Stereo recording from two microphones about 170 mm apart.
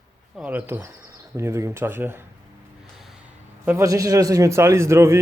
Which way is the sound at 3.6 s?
15° right (ahead or behind).